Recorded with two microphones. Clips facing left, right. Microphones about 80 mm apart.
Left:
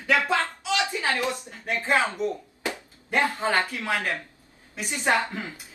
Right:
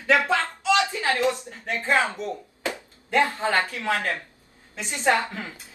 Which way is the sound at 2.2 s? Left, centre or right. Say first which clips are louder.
Left 2 dB; left.